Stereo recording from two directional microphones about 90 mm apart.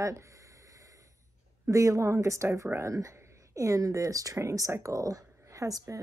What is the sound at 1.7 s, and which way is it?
A woman's voice, 35° right (ahead or behind).